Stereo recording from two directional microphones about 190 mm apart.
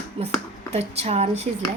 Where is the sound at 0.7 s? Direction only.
35° right (ahead or behind).